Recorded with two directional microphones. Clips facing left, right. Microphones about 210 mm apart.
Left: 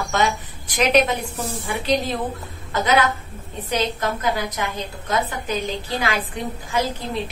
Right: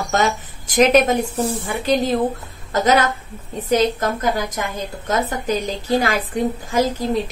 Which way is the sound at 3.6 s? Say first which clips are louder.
Right 6 dB; 45° right (ahead or behind).